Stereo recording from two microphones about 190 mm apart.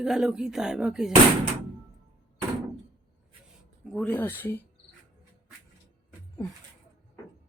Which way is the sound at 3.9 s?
5° left (ahead or behind).